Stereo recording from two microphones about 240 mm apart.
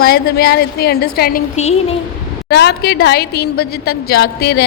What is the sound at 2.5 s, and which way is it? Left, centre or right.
A woman's voice, left.